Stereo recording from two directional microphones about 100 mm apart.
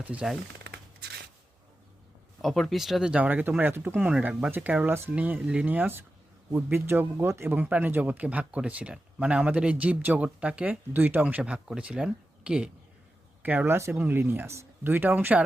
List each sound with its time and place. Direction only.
0.0 s speech: 15° right (ahead or behind)
2.4 s speech: centre (ahead or behind)
13.4 s speech: 20° right (ahead or behind)